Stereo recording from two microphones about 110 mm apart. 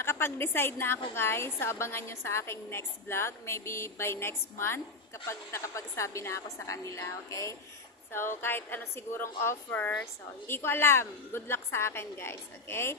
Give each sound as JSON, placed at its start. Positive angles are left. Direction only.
{"t": 0.0, "sound": "a woman's voice", "side_deg": 20}